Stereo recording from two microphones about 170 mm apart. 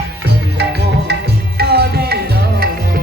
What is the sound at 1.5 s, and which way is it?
Tabla, 65° right (ahead or behind).